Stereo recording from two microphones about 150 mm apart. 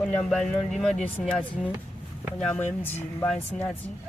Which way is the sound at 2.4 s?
10° left (ahead or behind).